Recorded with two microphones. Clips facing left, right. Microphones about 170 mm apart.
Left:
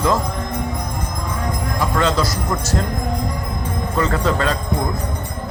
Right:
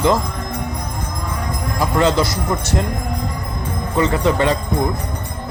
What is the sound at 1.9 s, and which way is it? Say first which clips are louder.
Jingle bell: right 3 dB; 25° right (ahead or behind).